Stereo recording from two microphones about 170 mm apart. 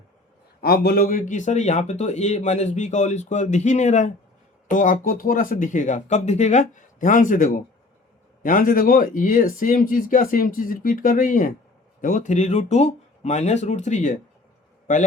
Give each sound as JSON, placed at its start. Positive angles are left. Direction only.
{"t": 0.6, "sound": "a man's voice", "side_deg": 70}